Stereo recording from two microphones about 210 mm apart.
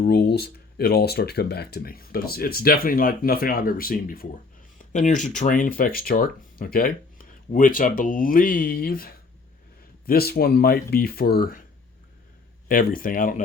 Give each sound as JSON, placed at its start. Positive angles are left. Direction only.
{"t": 0.0, "sound": "speech", "side_deg": 50}
{"t": 12.6, "sound": "speech", "side_deg": 40}